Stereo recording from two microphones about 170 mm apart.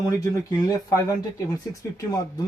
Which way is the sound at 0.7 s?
20° left (ahead or behind).